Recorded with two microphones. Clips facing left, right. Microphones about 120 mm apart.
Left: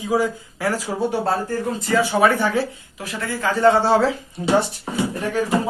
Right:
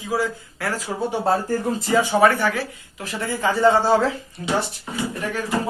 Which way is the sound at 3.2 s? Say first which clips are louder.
Left 1 dB; 10° right (ahead or behind).